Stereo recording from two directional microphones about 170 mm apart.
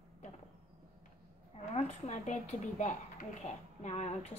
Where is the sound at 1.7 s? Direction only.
40° left (ahead or behind).